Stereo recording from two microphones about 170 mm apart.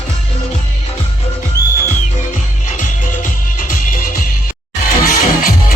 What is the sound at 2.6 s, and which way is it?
Music, 50° left (ahead or behind).